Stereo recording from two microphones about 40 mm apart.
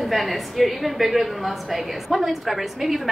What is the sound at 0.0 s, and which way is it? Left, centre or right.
A woman's voice, centre.